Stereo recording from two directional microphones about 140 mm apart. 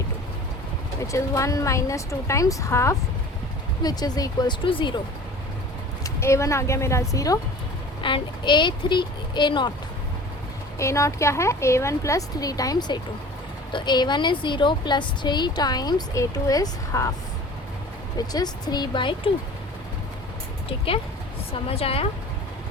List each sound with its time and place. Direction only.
1.0 s a woman's voice: 20° left (ahead or behind)
6.0 s a woman's voice: 20° left (ahead or behind)
8.0 s a woman's voice: 35° left (ahead or behind)
10.8 s a woman's voice: 20° left (ahead or behind)
18.2 s a woman's voice: 30° left (ahead or behind)
20.7 s a woman's voice: 40° left (ahead or behind)